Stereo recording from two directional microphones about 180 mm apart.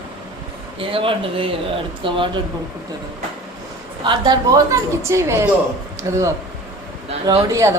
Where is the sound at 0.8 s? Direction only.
30° right (ahead or behind).